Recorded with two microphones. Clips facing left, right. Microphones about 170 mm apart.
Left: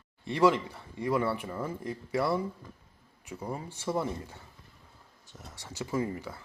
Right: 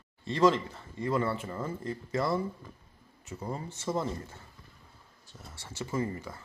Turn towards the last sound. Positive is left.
turn(degrees=10)  # may be behind; listen again after turning